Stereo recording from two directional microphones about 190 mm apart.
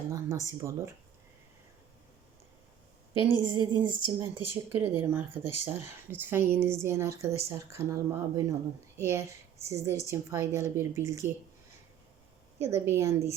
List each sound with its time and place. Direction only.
0.1 s speech: 15° right (ahead or behind)
3.5 s speech: 25° right (ahead or behind)
4.8 s speech: 10° right (ahead or behind)
12.5 s speech: 15° right (ahead or behind)